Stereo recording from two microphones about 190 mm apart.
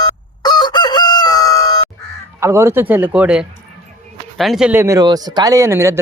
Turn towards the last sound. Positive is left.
turn(degrees=-15)  # may be behind; listen again after turning